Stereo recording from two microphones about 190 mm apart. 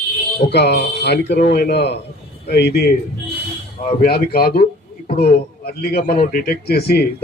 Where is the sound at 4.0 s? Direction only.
55° left (ahead or behind).